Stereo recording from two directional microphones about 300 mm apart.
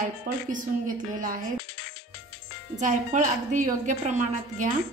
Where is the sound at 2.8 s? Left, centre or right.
Right.